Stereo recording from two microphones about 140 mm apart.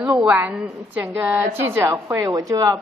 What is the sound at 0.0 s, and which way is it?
A woman's voice, 5° right (ahead or behind).